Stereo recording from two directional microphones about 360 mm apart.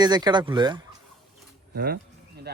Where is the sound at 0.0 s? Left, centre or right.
Centre.